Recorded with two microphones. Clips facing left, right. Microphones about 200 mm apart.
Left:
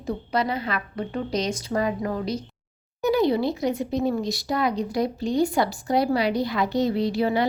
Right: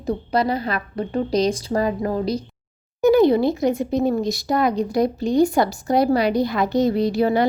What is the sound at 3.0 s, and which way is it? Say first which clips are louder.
Speech: right 6 dB; 50° right (ahead or behind).